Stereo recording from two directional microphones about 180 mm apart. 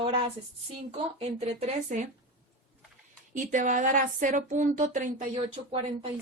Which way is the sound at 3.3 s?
45° right (ahead or behind).